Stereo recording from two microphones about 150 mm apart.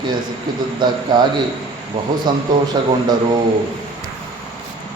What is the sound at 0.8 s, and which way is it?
Speech, 30° right (ahead or behind).